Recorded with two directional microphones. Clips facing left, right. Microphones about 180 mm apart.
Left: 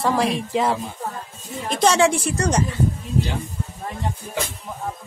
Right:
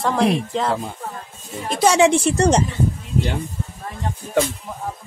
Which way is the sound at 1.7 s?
5° right (ahead or behind).